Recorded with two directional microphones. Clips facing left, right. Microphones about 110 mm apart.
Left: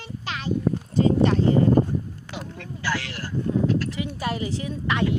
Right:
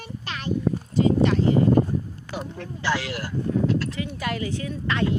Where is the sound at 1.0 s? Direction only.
35° left (ahead or behind).